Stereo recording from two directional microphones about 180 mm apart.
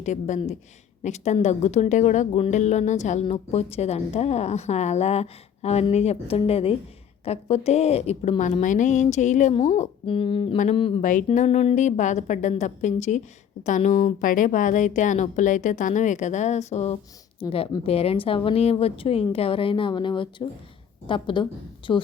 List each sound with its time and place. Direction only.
0.0 s a woman's voice: 40° left (ahead or behind); by 22.0 s 25° left (ahead or behind)